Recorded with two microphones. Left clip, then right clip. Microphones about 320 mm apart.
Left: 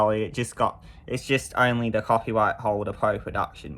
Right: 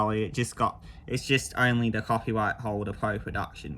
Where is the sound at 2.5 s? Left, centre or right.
Centre.